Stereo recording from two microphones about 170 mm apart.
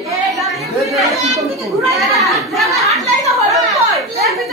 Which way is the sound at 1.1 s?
Centre (ahead or behind).